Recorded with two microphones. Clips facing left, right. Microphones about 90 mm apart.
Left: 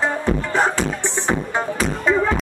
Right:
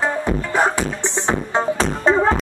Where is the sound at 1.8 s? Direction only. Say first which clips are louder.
Right 1 dB; 30° right (ahead or behind).